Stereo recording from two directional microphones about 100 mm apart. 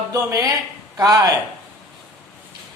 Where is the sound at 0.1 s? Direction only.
35° right (ahead or behind).